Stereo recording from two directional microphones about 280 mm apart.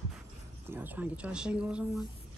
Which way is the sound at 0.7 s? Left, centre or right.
Centre.